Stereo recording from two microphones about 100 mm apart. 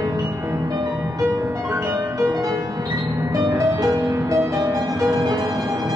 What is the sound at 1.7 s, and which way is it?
Music, 30° right (ahead or behind).